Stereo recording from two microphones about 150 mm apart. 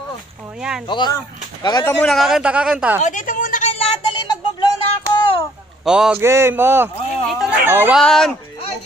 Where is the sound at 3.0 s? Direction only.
60° left (ahead or behind).